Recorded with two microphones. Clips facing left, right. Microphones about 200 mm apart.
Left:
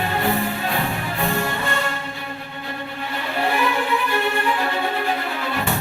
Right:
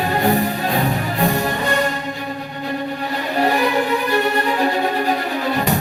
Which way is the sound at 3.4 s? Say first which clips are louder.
Right 4 dB; 40° right (ahead or behind).